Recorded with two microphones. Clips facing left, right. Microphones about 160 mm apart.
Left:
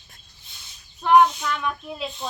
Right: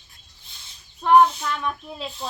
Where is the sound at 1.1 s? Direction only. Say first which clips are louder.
Even; 30° right (ahead or behind).